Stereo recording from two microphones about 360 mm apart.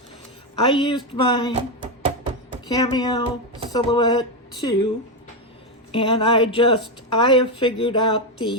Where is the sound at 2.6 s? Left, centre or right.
Centre.